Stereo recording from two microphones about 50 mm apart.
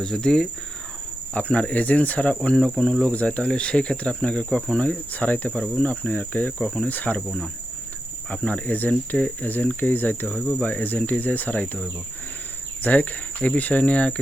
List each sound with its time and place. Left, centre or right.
0.0 s speech: centre
1.3 s speech: left
2.6 s speech: centre
3.1 s speech: left
4.8 s speech: left
7.3 s speech: centre
8.4 s speech: left
10.2 s speech: left